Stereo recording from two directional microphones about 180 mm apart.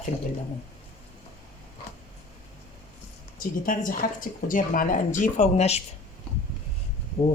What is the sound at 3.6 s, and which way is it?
Speech, 50° left (ahead or behind).